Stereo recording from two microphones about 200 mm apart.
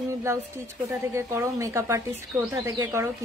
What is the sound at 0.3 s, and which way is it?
Speech, 15° right (ahead or behind).